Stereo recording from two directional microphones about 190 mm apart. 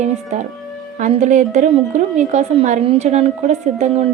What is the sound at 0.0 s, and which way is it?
A woman's voice, 40° right (ahead or behind).